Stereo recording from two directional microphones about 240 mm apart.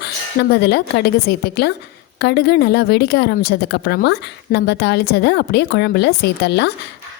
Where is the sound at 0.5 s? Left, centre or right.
Left.